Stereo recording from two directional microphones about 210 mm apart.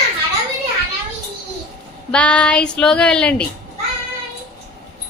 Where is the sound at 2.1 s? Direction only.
5° left (ahead or behind).